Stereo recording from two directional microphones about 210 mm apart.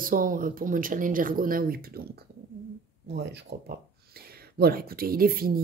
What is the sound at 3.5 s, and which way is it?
Speech, 45° right (ahead or behind).